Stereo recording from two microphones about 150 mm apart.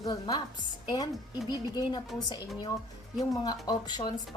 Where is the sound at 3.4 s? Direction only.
30° left (ahead or behind).